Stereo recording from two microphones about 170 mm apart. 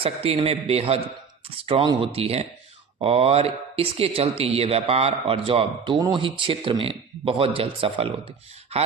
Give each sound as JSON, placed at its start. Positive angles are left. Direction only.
{"t": 0.0, "sound": "speech", "side_deg": -35}